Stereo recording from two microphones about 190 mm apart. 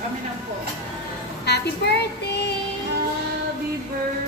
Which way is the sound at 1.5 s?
60° left (ahead or behind).